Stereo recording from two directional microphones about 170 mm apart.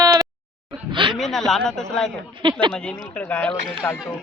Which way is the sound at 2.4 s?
25° right (ahead or behind).